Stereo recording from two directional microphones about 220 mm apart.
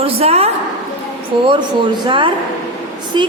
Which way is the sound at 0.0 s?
25° right (ahead or behind).